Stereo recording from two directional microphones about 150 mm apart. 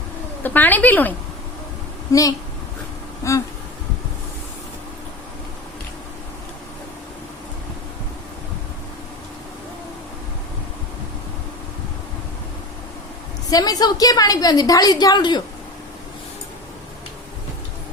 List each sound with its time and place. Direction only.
0.4 s a woman's voice: 10° left (ahead or behind)
13.5 s a woman's voice: 25° left (ahead or behind)